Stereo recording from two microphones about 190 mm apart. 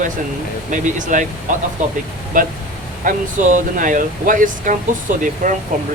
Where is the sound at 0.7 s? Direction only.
40° right (ahead or behind).